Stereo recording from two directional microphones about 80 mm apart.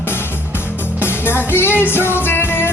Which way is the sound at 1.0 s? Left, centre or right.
Left.